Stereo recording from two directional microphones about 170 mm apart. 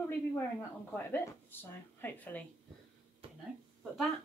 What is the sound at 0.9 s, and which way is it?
Speech, 10° left (ahead or behind).